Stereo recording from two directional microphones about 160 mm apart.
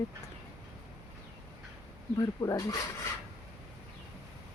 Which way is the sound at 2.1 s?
20° left (ahead or behind).